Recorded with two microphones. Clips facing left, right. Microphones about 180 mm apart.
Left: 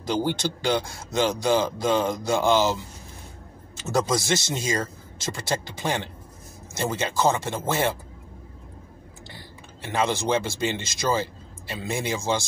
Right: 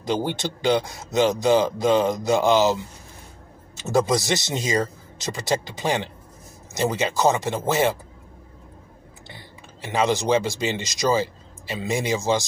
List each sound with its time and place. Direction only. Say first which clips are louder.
0.0 s speech: even; 20° right (ahead or behind)
4.1 s speech: right 2 dB; 20° right (ahead or behind)
9.8 s speech: right 3 dB; 15° right (ahead or behind)